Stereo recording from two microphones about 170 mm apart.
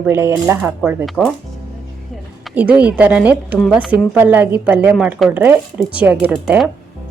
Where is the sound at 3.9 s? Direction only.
10° right (ahead or behind).